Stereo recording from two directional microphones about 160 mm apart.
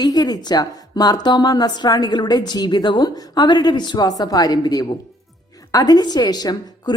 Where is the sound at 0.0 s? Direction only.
25° left (ahead or behind).